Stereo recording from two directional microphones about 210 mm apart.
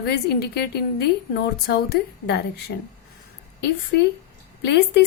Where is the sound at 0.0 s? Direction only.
50° left (ahead or behind).